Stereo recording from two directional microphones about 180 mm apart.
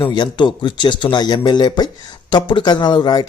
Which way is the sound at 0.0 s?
25° left (ahead or behind).